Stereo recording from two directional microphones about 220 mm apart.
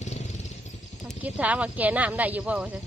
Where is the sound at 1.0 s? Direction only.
5° right (ahead or behind).